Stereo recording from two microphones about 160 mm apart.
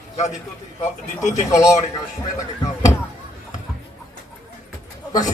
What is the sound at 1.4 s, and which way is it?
Speech, 20° left (ahead or behind).